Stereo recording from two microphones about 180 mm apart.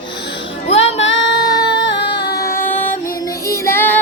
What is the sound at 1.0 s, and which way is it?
Female singing, 90° left.